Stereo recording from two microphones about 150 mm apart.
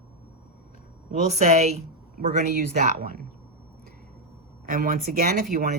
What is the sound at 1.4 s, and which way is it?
Speech, 50° right (ahead or behind).